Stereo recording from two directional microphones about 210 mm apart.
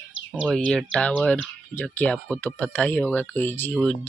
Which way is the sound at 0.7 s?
Centre (ahead or behind).